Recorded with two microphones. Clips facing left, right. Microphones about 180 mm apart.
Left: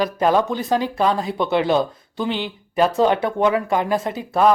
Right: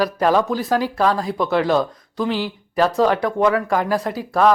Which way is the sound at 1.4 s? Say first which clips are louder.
Even; 25° left (ahead or behind).